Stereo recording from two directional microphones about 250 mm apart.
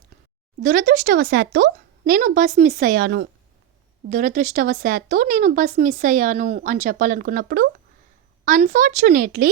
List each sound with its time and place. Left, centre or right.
0.6 s speech: right